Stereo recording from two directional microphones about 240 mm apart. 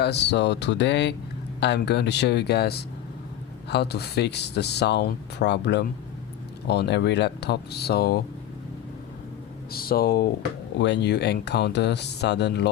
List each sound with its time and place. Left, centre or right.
0.0 s speech: left
9.7 s speech: left